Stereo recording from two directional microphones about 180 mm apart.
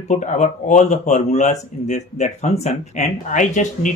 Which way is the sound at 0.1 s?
40° left (ahead or behind).